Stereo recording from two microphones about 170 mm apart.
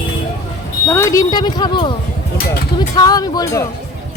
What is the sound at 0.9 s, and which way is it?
Speech, 15° left (ahead or behind).